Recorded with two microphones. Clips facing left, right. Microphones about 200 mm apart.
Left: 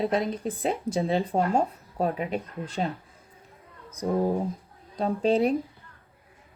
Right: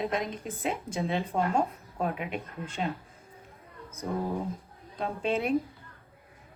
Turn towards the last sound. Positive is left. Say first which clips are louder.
# left 6 dB
turn(degrees=35)  # may be behind; listen again after turning